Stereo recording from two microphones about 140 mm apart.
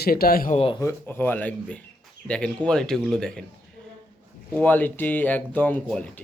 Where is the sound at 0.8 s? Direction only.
15° left (ahead or behind).